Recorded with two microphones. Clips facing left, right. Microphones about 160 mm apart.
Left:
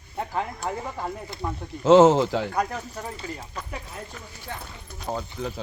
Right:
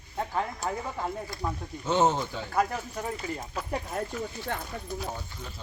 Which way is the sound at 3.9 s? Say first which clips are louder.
Right 7 dB; 60° right (ahead or behind).